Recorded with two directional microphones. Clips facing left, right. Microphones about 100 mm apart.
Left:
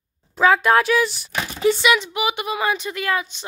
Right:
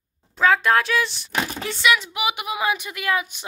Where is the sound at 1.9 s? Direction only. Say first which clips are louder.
Left 2 dB; 5° right (ahead or behind).